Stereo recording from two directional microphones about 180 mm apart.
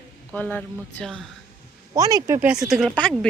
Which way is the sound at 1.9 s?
20° right (ahead or behind).